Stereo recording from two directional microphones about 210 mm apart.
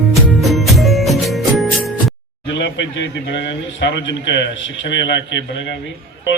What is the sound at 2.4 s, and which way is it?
A man's voice, 60° left (ahead or behind).